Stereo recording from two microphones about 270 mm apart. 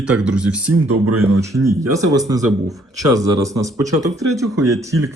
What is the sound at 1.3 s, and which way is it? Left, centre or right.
Speech, centre.